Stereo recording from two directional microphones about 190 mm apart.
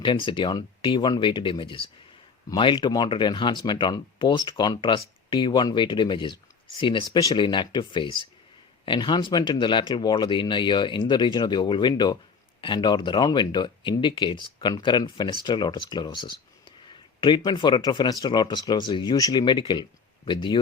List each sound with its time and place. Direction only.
0.0 s speech: 25° left (ahead or behind)